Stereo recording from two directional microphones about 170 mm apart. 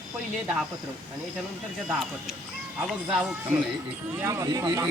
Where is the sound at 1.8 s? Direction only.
5° right (ahead or behind).